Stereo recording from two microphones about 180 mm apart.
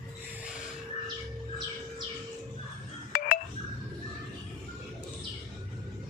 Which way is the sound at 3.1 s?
50° left (ahead or behind).